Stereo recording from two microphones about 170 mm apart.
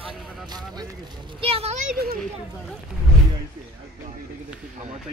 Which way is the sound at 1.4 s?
35° right (ahead or behind).